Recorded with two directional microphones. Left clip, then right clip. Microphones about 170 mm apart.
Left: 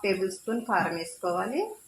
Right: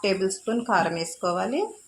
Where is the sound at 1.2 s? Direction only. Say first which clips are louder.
Right 3 dB; 50° right (ahead or behind).